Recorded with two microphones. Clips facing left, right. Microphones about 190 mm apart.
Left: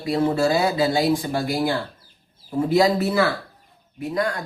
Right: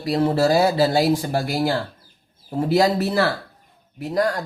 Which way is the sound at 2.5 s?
40° right (ahead or behind).